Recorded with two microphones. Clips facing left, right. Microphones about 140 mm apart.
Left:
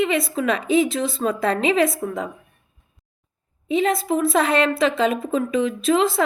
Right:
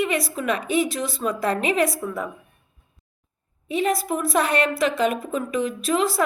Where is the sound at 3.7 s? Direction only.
25° left (ahead or behind).